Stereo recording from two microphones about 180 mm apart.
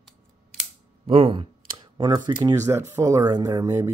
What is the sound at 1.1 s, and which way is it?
Mantra, 30° right (ahead or behind).